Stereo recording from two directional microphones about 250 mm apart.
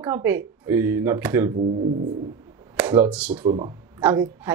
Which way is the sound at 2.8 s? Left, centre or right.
Centre.